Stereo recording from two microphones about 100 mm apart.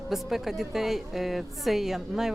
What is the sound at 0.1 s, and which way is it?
A woman's voice, centre (ahead or behind).